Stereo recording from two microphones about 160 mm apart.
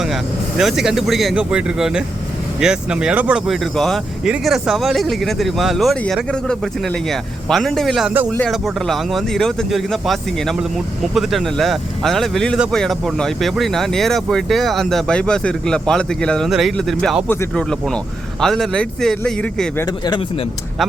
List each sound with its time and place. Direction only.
0.0 s speech: centre (ahead or behind)
8.3 s speech: 10° left (ahead or behind)
19.8 s speech: 25° left (ahead or behind)